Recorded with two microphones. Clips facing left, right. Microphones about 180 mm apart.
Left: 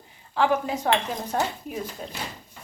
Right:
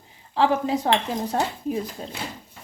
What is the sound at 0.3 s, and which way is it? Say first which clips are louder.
Speech: right 2 dB; 30° right (ahead or behind).